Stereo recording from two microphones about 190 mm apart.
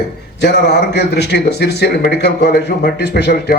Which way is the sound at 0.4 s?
65° left (ahead or behind).